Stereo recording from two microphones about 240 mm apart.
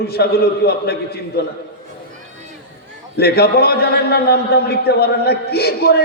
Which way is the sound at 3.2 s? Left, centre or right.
Left.